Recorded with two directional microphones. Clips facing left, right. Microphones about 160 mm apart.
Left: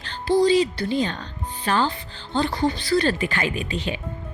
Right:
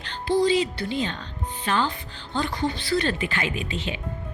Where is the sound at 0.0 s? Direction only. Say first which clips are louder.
Left 3 dB; 35° left (ahead or behind).